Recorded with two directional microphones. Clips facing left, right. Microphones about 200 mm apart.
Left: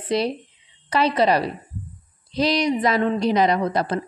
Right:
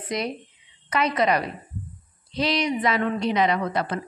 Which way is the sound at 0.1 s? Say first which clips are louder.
Left 6 dB; 30° left (ahead or behind).